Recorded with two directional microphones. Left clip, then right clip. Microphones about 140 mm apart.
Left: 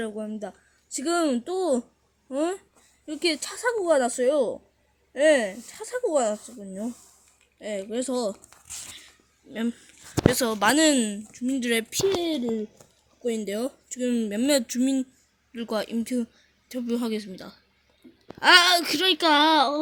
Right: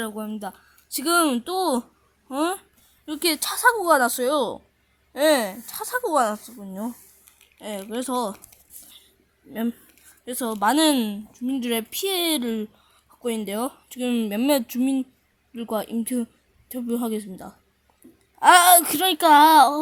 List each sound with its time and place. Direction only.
0.0 s speech: 35° right (ahead or behind)
9.5 s speech: 35° right (ahead or behind)
10.2 s speech: 25° right (ahead or behind)
12.2 s speech: 65° right (ahead or behind)
13.2 s a woman's voice: 25° right (ahead or behind)
18.0 s a sound: 40° right (ahead or behind)
18.3 s speech: 35° right (ahead or behind)